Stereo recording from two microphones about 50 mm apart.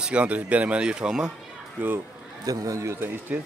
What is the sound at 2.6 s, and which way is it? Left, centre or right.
Speech, right.